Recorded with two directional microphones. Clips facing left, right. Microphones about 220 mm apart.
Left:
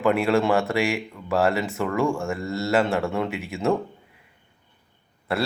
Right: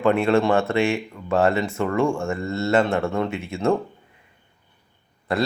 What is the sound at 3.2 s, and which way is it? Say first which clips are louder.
Speech: right 2 dB; 15° left (ahead or behind).